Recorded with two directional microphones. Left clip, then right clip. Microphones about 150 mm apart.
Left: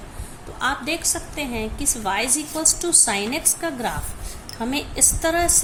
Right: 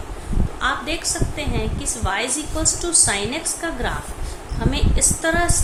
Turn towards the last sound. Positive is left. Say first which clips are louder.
# even
turn(degrees=50)  # may be behind; listen again after turning